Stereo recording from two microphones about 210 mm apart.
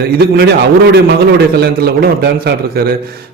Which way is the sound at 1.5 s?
50° right (ahead or behind).